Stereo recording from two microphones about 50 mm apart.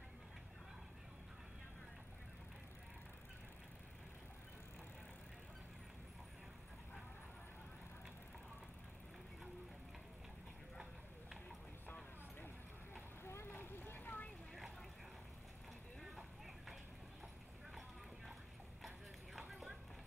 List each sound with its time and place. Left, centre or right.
13.2 s vehicle: left
13.5 s vehicle: left
16.0 s clip-clop: centre
18.8 s clip-clop: centre